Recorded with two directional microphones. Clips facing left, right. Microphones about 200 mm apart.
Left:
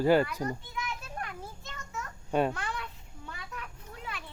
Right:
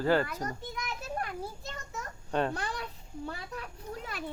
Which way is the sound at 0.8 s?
35° right (ahead or behind).